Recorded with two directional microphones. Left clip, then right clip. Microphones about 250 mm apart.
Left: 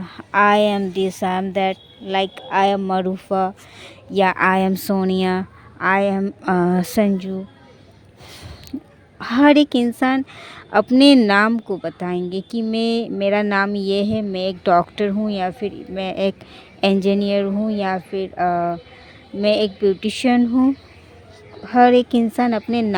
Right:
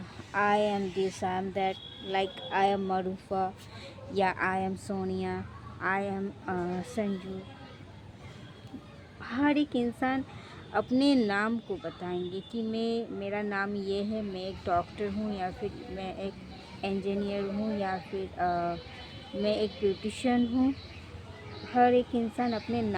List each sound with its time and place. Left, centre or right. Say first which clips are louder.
0.0 s a woman's voice: left 13 dB; left
9.2 s a woman's voice: left 15 dB; left
21.7 s a woman's voice: left 11 dB; left